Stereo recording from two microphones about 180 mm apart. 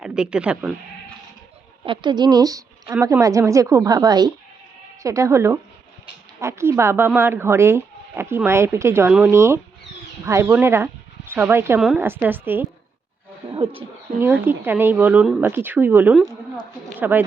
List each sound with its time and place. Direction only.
0.0 s speech: 5° right (ahead or behind)
1.8 s a woman's voice: 25° right (ahead or behind); by 12.6 s 10° right (ahead or behind)
13.5 s speech: 30° right (ahead or behind)
14.4 s speech: 10° right (ahead or behind)